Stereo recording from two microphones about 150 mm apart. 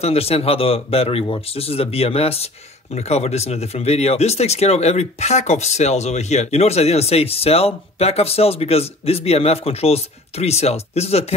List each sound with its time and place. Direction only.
0.0 s speech: 40° left (ahead or behind)